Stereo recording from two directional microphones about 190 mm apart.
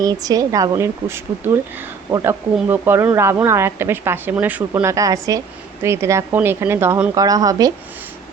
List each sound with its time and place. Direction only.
0.0 s speech: 20° right (ahead or behind)